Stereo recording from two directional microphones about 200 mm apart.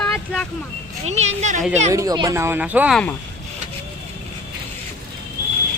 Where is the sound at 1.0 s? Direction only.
35° right (ahead or behind).